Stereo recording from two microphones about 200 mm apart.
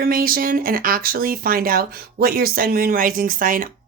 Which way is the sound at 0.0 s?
45° right (ahead or behind).